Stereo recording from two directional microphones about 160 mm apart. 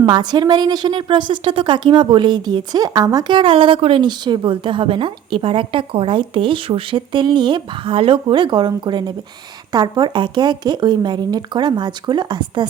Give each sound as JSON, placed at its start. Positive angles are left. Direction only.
{"t": 0.0, "sound": "a woman's voice", "side_deg": -25}